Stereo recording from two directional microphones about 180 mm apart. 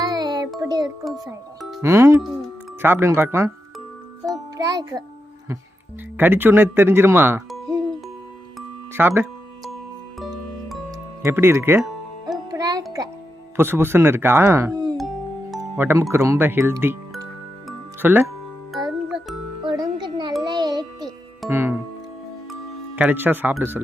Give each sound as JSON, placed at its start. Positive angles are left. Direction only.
{"t": 0.0, "sound": "music", "side_deg": -20}
{"t": 1.8, "sound": "speech", "side_deg": -15}
{"t": 4.5, "sound": "a child's voice", "side_deg": -20}
{"t": 6.1, "sound": "speech", "side_deg": -10}
{"t": 8.9, "sound": "speech", "side_deg": -15}
{"t": 11.2, "sound": "speech", "side_deg": -15}
{"t": 12.5, "sound": "music", "side_deg": -20}
{"t": 13.6, "sound": "speech", "side_deg": -10}
{"t": 15.4, "sound": "music", "side_deg": 0}
{"t": 15.8, "sound": "speech", "side_deg": -10}
{"t": 18.9, "sound": "music", "side_deg": 0}
{"t": 19.6, "sound": "music", "side_deg": -25}
{"t": 21.5, "sound": "speech", "side_deg": -15}
{"t": 23.0, "sound": "speech", "side_deg": -10}